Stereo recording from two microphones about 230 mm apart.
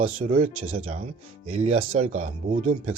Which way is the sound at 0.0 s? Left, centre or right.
Right.